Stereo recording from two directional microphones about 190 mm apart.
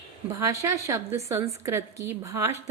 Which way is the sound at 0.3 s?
15° right (ahead or behind).